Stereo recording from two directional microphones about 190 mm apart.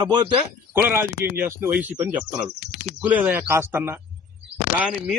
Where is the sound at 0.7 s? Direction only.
10° right (ahead or behind).